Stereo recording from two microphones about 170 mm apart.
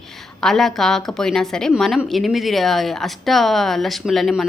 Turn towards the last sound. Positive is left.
turn(degrees=0)  # may be behind; listen again after turning